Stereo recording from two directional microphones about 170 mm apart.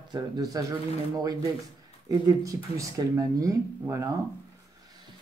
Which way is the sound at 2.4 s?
20° right (ahead or behind).